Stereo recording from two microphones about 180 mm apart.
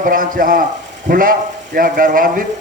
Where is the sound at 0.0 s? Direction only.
50° right (ahead or behind).